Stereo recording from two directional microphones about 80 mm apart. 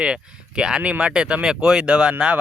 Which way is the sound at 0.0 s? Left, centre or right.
Centre.